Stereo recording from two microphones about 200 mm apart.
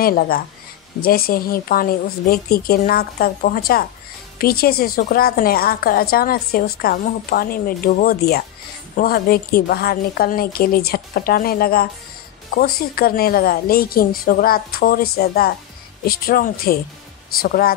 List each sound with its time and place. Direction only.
0.0 s a woman's voice: 45° left (ahead or behind)